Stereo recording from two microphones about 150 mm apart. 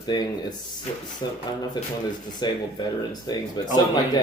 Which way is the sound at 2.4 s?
30° left (ahead or behind).